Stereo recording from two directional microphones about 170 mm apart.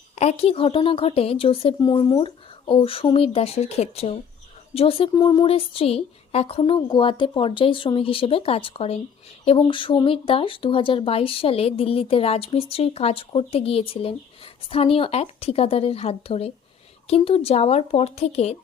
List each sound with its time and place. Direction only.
0.2 s speech: 40° left (ahead or behind)